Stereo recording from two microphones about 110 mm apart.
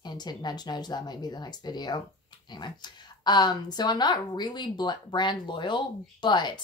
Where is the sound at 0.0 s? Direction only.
40° left (ahead or behind).